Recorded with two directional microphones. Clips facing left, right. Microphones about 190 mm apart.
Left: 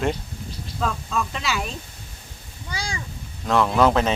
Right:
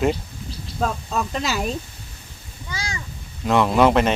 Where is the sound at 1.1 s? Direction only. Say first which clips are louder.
Right 2 dB; 40° right (ahead or behind).